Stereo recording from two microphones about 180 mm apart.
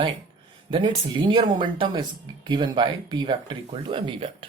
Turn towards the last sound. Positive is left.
turn(degrees=-30)  # may be behind; listen again after turning